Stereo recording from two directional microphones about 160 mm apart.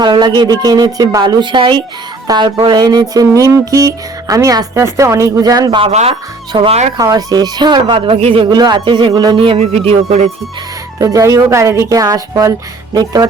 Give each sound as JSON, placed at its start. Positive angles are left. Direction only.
{"t": 0.0, "sound": "speech", "side_deg": -25}
{"t": 5.9, "sound": "speech", "side_deg": -45}
{"t": 6.5, "sound": "speech", "side_deg": -30}
{"t": 11.0, "sound": "speech", "side_deg": -20}